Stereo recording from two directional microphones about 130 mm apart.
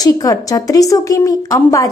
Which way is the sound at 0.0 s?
30° left (ahead or behind).